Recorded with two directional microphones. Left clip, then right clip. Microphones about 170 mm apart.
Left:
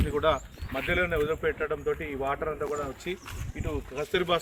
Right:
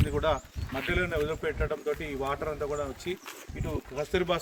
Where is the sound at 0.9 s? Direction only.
75° right (ahead or behind).